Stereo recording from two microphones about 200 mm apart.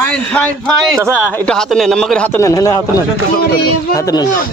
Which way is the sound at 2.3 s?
15° left (ahead or behind).